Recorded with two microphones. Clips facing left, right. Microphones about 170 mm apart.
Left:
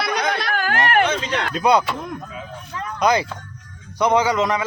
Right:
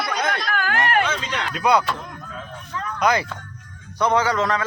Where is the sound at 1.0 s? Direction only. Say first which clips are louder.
Left 4 dB; 40° left (ahead or behind).